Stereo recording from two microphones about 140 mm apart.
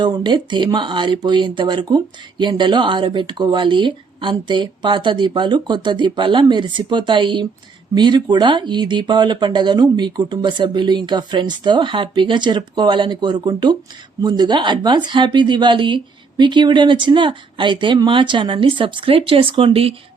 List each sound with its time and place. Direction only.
0.0 s speech: 30° right (ahead or behind)